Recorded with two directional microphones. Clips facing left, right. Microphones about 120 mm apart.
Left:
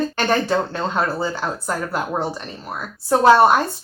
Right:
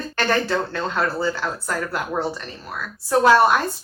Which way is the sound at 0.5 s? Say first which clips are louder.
Left 3 dB; 20° left (ahead or behind).